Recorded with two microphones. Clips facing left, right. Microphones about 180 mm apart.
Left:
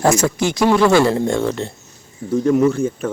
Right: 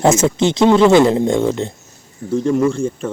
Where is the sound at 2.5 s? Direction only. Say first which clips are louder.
Left 1 dB; 5° left (ahead or behind).